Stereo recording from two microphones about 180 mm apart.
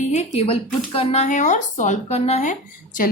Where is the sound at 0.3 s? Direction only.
35° left (ahead or behind).